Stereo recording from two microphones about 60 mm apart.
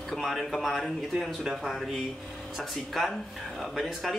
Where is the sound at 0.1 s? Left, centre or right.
Centre.